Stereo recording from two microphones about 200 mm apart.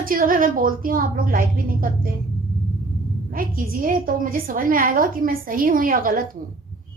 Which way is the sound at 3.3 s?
45° right (ahead or behind).